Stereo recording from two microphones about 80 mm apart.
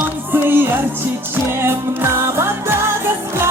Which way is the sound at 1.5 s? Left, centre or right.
Right.